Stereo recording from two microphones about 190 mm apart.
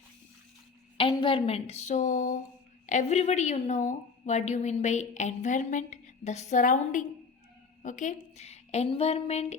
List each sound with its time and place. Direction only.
0.9 s a woman's voice: 25° left (ahead or behind)